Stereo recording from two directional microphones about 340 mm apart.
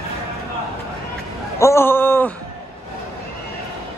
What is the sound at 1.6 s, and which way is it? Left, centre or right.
Speech, centre.